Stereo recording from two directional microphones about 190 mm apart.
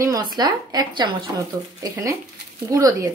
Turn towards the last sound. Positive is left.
turn(degrees=-15)  # may be behind; listen again after turning